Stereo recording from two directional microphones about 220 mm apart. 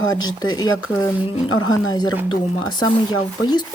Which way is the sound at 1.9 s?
20° left (ahead or behind).